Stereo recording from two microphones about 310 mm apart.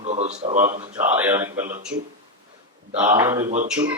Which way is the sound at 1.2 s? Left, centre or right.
Centre.